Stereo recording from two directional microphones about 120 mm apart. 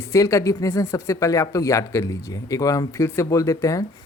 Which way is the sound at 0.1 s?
25° left (ahead or behind).